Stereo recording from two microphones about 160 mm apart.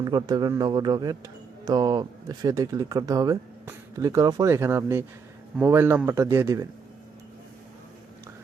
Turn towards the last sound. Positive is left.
turn(degrees=-20)  # may be behind; listen again after turning